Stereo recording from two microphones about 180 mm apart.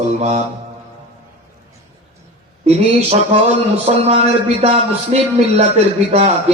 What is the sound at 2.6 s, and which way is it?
A man's voice, 35° right (ahead or behind).